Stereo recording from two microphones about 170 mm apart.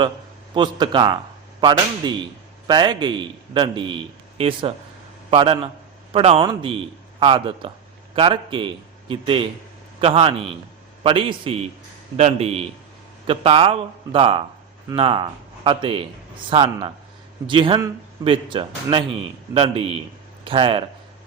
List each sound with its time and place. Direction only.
0.5 s a man's voice: 25° right (ahead or behind)